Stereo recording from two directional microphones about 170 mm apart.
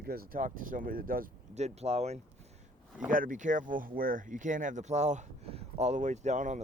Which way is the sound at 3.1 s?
50° right (ahead or behind).